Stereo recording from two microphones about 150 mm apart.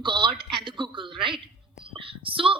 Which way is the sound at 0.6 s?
35° right (ahead or behind).